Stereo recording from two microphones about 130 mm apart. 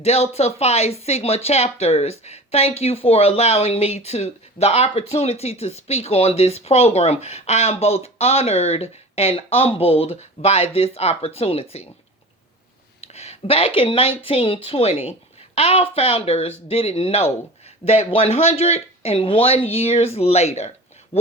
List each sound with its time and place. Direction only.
0.0 s speech: 55° left (ahead or behind)
13.0 s a sound: 55° left (ahead or behind)
13.7 s speech: 45° left (ahead or behind)